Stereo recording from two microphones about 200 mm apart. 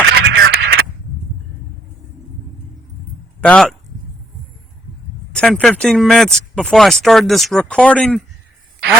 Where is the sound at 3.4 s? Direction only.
5° left (ahead or behind).